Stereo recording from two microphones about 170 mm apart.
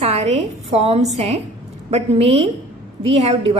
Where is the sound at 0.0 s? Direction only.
40° right (ahead or behind).